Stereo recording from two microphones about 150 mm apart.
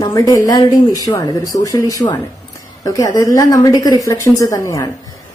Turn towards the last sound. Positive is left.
turn(degrees=20)  # may be behind; listen again after turning